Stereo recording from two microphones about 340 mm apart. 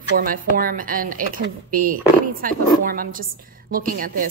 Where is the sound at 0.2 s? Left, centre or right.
Right.